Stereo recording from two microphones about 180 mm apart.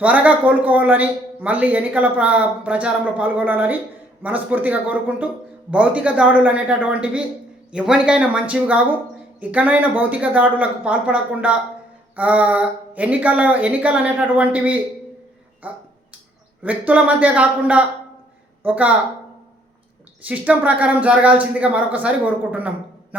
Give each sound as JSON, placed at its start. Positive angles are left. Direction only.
{"t": 0.0, "sound": "speech", "side_deg": -10}
{"t": 20.2, "sound": "speech", "side_deg": -10}